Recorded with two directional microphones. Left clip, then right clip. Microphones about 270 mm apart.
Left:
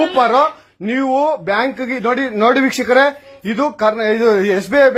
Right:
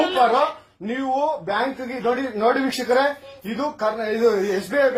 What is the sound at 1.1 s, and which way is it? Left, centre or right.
Speech, left.